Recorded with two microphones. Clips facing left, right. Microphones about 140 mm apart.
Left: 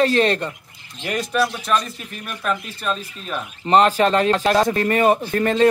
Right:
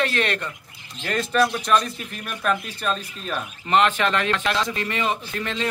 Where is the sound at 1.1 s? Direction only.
10° left (ahead or behind).